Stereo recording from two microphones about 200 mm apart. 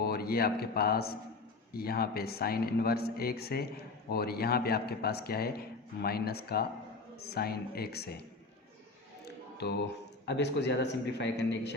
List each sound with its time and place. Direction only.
0.0 s a man's voice: 50° left (ahead or behind)
9.6 s speech: 55° left (ahead or behind)